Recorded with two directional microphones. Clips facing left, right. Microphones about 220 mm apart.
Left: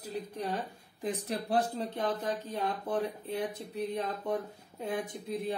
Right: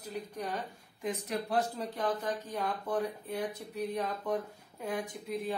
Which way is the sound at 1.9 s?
25° left (ahead or behind).